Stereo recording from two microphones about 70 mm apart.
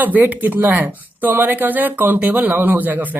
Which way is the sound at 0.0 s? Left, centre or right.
Right.